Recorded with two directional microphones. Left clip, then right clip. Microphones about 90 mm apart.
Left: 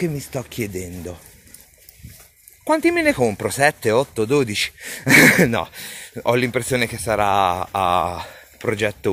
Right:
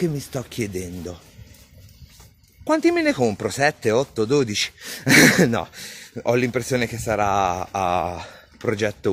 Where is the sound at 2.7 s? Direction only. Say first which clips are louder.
Left 1 dB; 20° right (ahead or behind).